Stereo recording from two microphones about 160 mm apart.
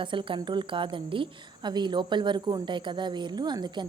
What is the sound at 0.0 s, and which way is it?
A woman's voice, 30° right (ahead or behind).